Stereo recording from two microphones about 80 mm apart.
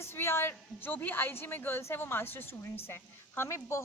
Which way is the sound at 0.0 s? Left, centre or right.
Left.